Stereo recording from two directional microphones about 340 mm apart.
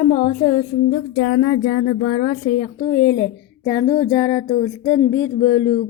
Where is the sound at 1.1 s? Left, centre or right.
Left.